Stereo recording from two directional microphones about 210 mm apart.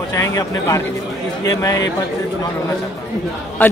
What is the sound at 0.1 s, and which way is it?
Speech, 15° left (ahead or behind).